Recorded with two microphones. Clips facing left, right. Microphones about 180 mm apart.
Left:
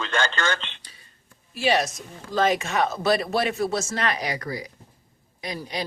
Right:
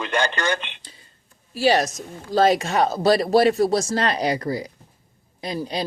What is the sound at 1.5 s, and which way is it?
Speech, 40° right (ahead or behind).